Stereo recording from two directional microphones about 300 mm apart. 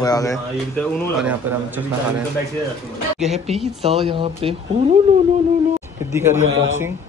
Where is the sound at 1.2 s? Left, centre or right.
Centre.